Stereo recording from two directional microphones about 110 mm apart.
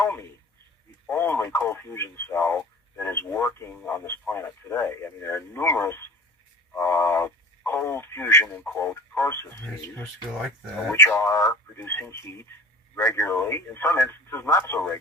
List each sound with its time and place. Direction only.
0.0 s a sound: 25° left (ahead or behind)
1.0 s speech: 20° left (ahead or behind)
7.3 s speech: 15° left (ahead or behind)
10.0 s speech: centre (ahead or behind)
11.2 s speech: 30° left (ahead or behind)